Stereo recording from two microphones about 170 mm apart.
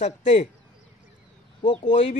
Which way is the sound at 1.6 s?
35° left (ahead or behind).